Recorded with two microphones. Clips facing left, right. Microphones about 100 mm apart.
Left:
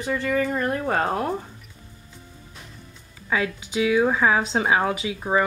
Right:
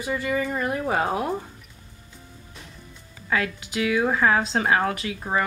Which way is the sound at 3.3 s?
15° left (ahead or behind).